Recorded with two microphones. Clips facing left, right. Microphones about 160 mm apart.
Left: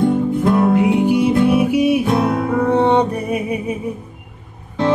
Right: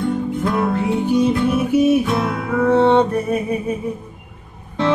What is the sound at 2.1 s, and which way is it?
Music, 40° left (ahead or behind).